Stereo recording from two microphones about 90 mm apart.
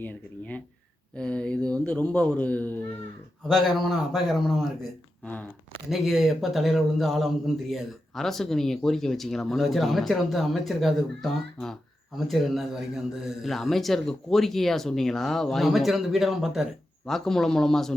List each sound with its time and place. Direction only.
0.0 s speech: 15° left (ahead or behind)
3.5 s speech: centre (ahead or behind)
5.2 s speech: 15° left (ahead or behind)
5.9 s speech: centre (ahead or behind)